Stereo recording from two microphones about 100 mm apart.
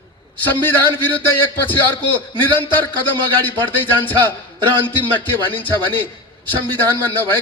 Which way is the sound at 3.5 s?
15° left (ahead or behind).